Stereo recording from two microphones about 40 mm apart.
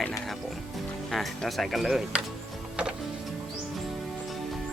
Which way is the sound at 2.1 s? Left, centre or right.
Right.